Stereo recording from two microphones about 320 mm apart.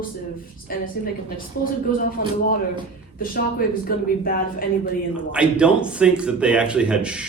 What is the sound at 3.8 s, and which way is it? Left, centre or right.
Speech, left.